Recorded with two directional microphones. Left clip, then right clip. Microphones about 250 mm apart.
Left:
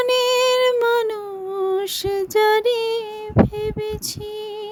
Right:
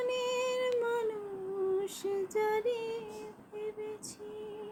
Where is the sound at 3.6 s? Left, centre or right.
Left.